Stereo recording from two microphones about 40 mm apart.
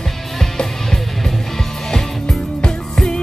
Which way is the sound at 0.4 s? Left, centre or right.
Centre.